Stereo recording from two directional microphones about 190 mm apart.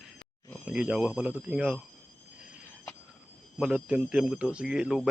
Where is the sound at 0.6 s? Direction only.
5° right (ahead or behind).